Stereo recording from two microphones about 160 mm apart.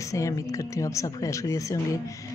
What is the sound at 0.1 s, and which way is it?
Speech, 20° left (ahead or behind).